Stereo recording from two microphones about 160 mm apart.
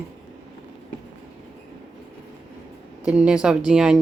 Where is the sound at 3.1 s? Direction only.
5° right (ahead or behind).